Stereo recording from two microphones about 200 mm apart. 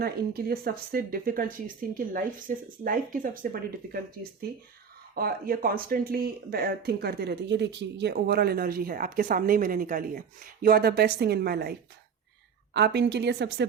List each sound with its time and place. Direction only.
0.0 s speech: 50° right (ahead or behind)
5.1 s a woman's voice: 50° right (ahead or behind)